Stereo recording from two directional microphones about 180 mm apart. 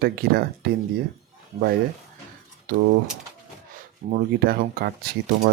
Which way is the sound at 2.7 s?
50° right (ahead or behind).